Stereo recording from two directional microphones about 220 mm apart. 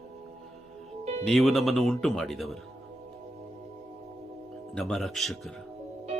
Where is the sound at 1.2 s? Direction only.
Centre (ahead or behind).